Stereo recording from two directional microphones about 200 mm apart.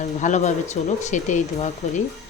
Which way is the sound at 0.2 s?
35° left (ahead or behind).